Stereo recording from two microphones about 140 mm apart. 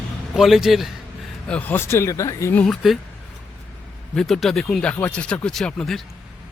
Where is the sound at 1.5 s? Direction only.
10° left (ahead or behind).